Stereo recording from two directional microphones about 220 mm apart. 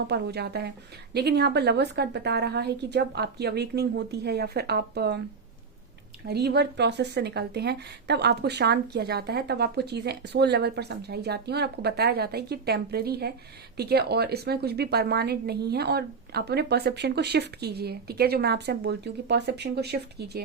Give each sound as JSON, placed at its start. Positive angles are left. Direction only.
{"t": 0.1, "sound": "speech", "side_deg": -50}
{"t": 6.2, "sound": "speech", "side_deg": -45}